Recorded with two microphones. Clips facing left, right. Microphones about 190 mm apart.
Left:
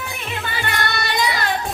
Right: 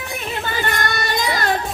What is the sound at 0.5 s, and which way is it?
Music, 45° right (ahead or behind).